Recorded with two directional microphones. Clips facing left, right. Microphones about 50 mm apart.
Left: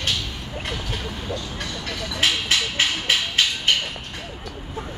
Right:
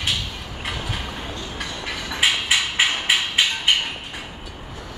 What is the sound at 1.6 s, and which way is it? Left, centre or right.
Train, centre.